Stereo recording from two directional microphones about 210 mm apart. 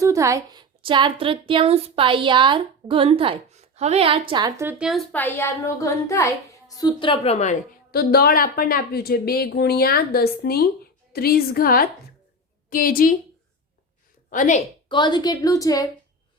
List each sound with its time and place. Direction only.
0.0 s a woman's voice: 15° right (ahead or behind); by 7.5 s 30° left (ahead or behind)
7.9 s a woman's voice: 45° left (ahead or behind)
14.3 s a woman's voice: 35° left (ahead or behind)
14.8 s a woman's voice: 20° left (ahead or behind)